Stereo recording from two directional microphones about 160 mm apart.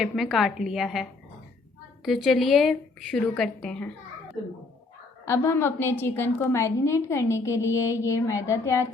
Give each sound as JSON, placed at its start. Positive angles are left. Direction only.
{"t": 0.0, "sound": "a woman's voice", "side_deg": 0}
{"t": 2.0, "sound": "a woman's voice", "side_deg": 0}
{"t": 5.2, "sound": "a woman's voice", "side_deg": 15}